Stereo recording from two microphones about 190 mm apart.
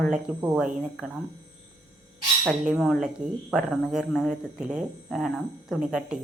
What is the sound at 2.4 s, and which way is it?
Speech, centre (ahead or behind).